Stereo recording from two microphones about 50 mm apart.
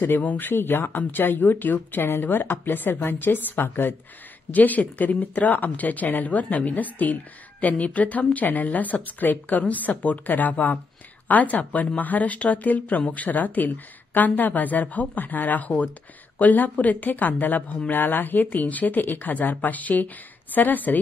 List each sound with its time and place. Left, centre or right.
0.0 s speech: left
4.5 s speech: left